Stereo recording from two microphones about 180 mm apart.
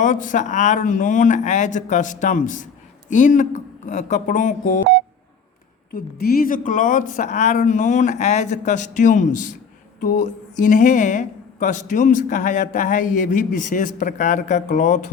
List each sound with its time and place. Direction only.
0.0 s a woman's voice: 45° left (ahead or behind)
5.9 s a woman's voice: 60° left (ahead or behind); by 15.1 s 40° left (ahead or behind)